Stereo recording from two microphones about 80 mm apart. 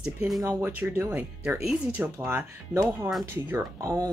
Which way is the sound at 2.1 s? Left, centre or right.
Right.